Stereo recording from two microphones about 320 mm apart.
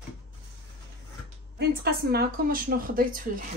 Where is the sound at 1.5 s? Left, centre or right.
Right.